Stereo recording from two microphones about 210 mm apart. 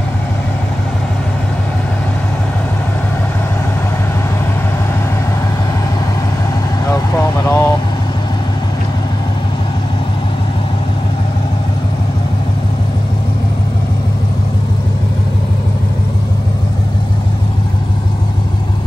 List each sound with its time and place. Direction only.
6.9 s vehicle: 15° left (ahead or behind)